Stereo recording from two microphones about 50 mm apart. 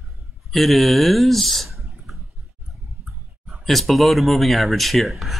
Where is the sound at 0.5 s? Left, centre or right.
Centre.